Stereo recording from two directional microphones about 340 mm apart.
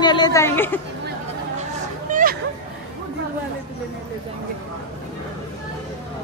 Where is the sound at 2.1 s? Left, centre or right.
Right.